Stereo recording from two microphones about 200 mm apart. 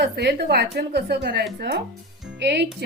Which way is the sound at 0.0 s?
55° right (ahead or behind).